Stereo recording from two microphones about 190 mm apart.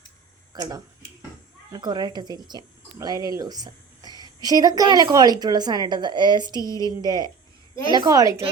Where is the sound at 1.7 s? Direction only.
20° right (ahead or behind).